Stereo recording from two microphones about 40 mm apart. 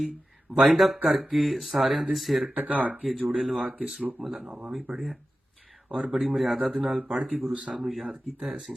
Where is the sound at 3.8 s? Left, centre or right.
Right.